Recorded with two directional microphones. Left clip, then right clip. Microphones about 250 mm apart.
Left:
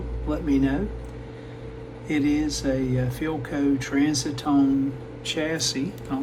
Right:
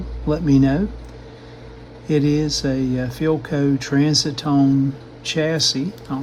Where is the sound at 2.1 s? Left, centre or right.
Right.